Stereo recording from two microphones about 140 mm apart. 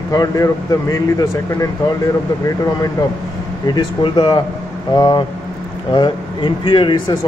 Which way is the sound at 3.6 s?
30° left (ahead or behind).